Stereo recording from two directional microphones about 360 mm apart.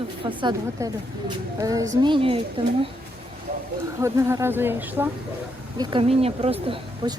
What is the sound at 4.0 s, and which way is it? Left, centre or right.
A woman's voice, centre.